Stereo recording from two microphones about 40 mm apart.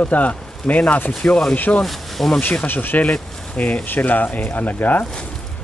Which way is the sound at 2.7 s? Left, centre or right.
Left.